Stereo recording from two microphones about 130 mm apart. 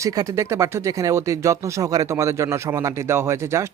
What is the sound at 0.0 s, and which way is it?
A man's voice, 25° right (ahead or behind).